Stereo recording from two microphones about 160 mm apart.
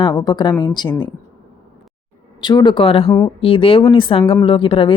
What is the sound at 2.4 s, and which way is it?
A woman's voice, 30° left (ahead or behind).